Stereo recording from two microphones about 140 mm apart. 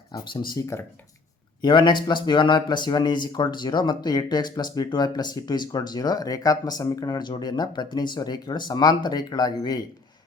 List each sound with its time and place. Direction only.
0.1 s speech: 30° left (ahead or behind)
1.6 s speech: 35° left (ahead or behind)